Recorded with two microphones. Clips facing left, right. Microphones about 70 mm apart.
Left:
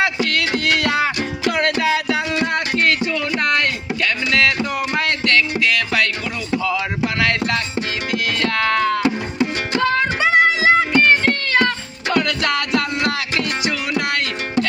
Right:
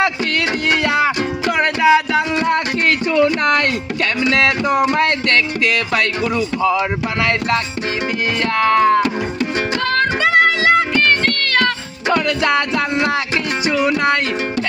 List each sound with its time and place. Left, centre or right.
0.0 s music: right; by 1.5 s centre
1.5 s music: right
4.3 s music: right
4.9 s speech: right
6.6 s music: right
8.4 s music: right
9.0 s music: centre
12.0 s music: right